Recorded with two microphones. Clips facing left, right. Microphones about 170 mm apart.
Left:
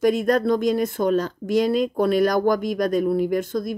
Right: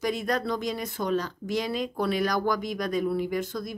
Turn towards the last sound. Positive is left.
turn(degrees=50)  # may be behind; listen again after turning